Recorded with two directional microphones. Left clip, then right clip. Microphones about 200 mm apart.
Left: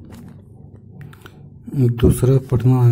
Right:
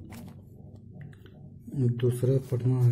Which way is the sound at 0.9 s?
30° left (ahead or behind).